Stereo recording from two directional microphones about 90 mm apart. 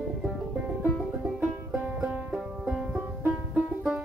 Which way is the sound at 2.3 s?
10° right (ahead or behind).